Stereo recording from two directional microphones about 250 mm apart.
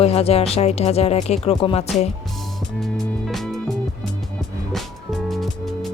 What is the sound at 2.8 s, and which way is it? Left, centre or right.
Music, centre.